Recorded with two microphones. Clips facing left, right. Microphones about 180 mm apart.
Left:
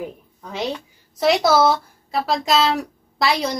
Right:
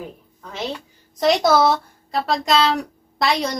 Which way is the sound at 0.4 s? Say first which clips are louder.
Left 3 dB; 15° left (ahead or behind).